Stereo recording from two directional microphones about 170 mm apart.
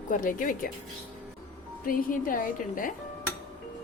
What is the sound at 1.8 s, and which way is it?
Speech, 55° left (ahead or behind).